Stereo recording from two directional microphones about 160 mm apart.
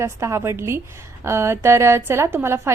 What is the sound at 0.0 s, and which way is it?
A woman's voice, 15° right (ahead or behind).